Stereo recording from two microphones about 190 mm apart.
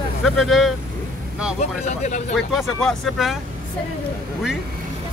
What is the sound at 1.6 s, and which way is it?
Speech, 40° left (ahead or behind).